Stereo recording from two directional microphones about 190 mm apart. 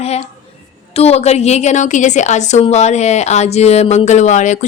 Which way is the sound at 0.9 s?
35° left (ahead or behind).